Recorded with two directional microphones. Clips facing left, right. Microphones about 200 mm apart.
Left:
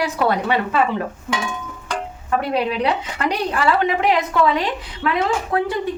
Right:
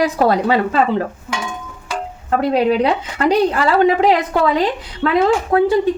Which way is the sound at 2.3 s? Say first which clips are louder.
Right 6 dB; 35° right (ahead or behind).